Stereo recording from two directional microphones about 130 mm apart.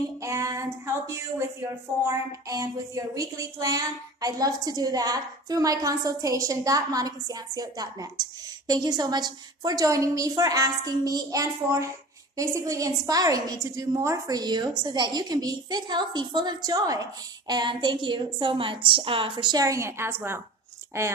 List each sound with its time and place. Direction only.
0.2 s female singing: 25° right (ahead or behind)
1.0 s a woman's voice: 20° right (ahead or behind)